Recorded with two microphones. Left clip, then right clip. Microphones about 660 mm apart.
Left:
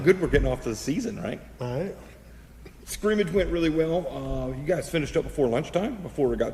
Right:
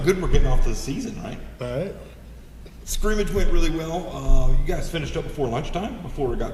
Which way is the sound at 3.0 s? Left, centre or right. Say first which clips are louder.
Left 1 dB; right.